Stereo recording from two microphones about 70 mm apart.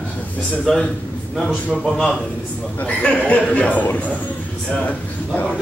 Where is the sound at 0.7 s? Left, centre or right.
Centre.